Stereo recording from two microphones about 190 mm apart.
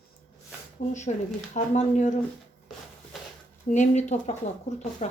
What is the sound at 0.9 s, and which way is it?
Speech, 40° left (ahead or behind).